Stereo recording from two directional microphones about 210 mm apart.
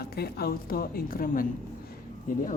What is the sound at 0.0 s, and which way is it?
A woman's voice, 50° left (ahead or behind).